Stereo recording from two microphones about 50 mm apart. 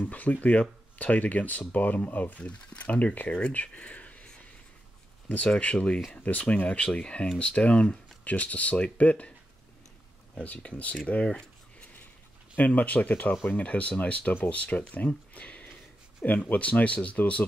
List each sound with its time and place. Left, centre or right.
0.0 s speech: left
2.4 s speech: left
5.5 s speech: left
10.4 s speech: left
12.5 s speech: left
15.3 s a sound: left
16.4 s speech: left